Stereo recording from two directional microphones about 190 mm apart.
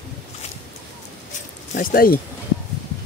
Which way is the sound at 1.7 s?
50° left (ahead or behind).